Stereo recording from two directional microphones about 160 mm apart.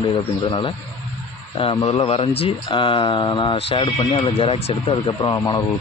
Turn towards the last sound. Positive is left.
turn(degrees=25)  # may be behind; listen again after turning